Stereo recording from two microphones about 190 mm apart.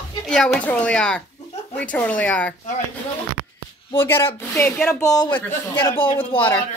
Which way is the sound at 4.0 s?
10° left (ahead or behind).